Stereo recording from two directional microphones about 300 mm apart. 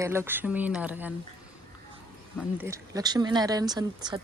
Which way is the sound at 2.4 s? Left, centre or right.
Centre.